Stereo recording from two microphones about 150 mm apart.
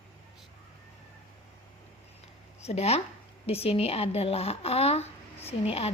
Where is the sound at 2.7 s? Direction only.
45° left (ahead or behind).